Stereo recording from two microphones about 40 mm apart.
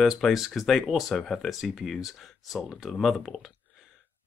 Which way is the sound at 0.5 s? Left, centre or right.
Centre.